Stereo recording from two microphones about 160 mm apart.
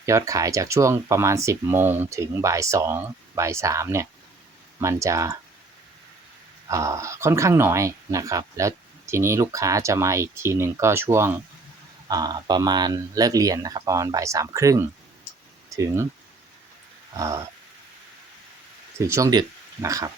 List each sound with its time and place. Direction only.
0.0 s speech: 20° right (ahead or behind)
6.7 s speech: 20° right (ahead or behind)
17.2 s speech: 20° right (ahead or behind)
18.9 s speech: 20° right (ahead or behind)